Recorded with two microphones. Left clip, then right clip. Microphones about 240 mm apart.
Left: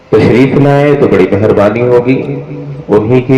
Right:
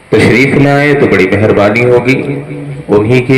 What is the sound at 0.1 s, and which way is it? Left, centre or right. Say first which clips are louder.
A man's voice: even; centre.